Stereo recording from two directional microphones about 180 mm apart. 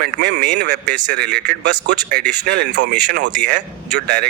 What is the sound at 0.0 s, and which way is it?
Speech, 70° right (ahead or behind).